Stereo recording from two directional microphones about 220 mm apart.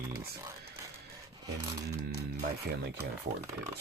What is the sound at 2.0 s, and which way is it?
Speech, 45° right (ahead or behind).